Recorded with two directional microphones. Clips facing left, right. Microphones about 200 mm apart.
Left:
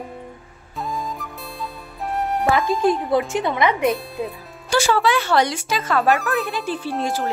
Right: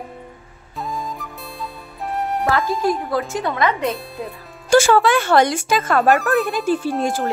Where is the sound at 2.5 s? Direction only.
20° left (ahead or behind).